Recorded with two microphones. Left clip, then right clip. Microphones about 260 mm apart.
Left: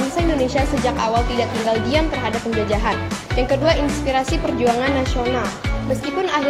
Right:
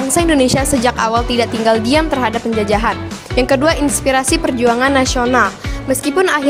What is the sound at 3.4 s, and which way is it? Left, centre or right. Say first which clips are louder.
Speech: right 5 dB; right.